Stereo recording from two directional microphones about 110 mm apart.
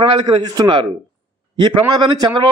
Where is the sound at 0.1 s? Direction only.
45° right (ahead or behind).